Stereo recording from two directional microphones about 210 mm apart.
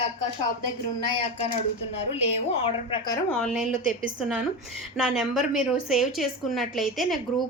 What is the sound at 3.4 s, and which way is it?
Speech, centre (ahead or behind).